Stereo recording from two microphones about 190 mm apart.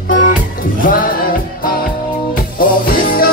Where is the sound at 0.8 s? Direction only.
45° left (ahead or behind).